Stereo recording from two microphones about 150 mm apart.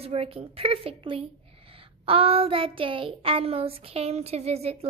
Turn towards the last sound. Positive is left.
turn(degrees=-45)  # may be behind; listen again after turning